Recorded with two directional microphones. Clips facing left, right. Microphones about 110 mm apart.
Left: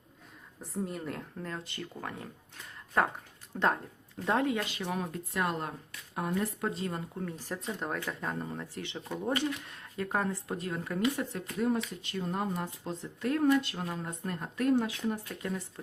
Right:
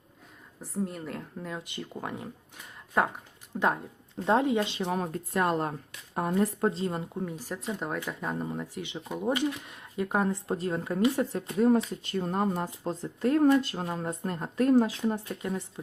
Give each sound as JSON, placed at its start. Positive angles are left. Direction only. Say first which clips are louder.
{"t": 0.6, "sound": "speech", "louder": "right 2 dB", "side_deg": 0}
{"t": 4.2, "sound": "speech", "louder": "right 4 dB", "side_deg": -20}
{"t": 4.9, "sound": "speech", "louder": "right 5 dB", "side_deg": -40}
{"t": 10.5, "sound": "speech", "louder": "right 5 dB", "side_deg": -30}